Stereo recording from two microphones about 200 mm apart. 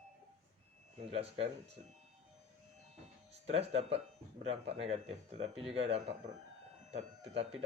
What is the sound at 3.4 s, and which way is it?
Speech, 30° right (ahead or behind).